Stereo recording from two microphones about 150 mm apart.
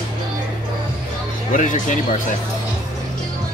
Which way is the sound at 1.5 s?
60° left (ahead or behind).